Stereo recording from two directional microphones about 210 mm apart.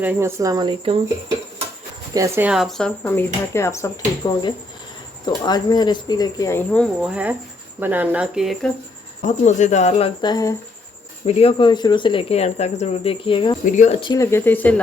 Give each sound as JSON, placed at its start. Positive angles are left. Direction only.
{"t": 0.0, "sound": "speech", "side_deg": -10}
{"t": 2.1, "sound": "speech", "side_deg": -15}
{"t": 9.2, "sound": "speech", "side_deg": 35}
{"t": 10.2, "sound": "speech", "side_deg": 20}
{"t": 13.7, "sound": "speech", "side_deg": 35}
{"t": 14.0, "sound": "speech", "side_deg": 15}